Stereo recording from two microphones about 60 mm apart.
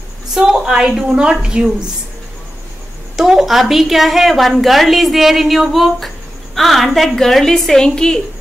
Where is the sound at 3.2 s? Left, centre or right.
Centre.